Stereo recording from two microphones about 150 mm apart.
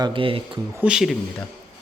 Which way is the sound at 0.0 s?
35° right (ahead or behind).